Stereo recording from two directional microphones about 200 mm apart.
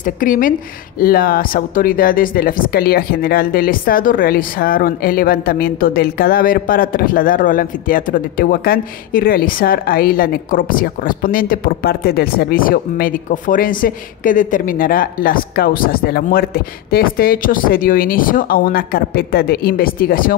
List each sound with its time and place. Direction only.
0.0 s speech: 40° left (ahead or behind)